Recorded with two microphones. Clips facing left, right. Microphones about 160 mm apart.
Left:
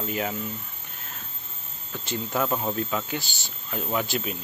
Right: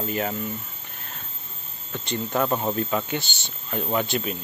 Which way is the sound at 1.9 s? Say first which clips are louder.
Right 3 dB; 5° left (ahead or behind).